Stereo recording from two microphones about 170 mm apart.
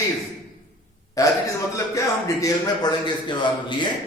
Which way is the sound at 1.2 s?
20° left (ahead or behind).